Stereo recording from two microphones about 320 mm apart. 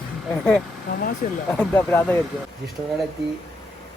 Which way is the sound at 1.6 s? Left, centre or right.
Centre.